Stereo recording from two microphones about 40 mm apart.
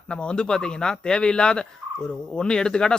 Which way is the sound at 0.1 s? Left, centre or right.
Left.